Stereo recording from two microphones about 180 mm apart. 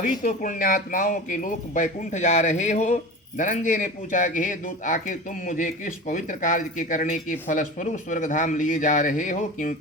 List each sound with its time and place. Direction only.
0.0 s speech: 50° left (ahead or behind)